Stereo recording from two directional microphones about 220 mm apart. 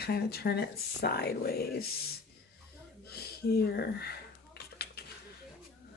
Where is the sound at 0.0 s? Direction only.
45° left (ahead or behind).